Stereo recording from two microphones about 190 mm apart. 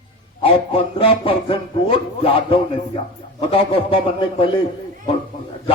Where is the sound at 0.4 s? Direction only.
30° left (ahead or behind).